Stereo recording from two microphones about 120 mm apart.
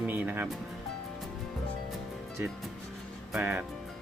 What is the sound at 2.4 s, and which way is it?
Speech, 15° right (ahead or behind).